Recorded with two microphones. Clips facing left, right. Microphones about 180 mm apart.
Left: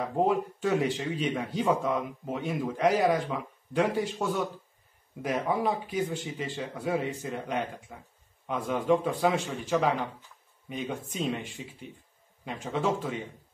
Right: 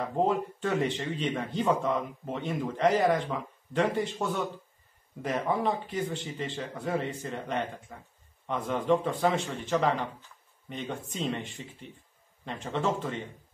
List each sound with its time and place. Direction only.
0.0 s speech: 5° left (ahead or behind)